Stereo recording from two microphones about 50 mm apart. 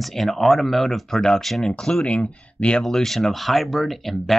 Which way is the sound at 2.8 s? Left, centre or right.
Centre.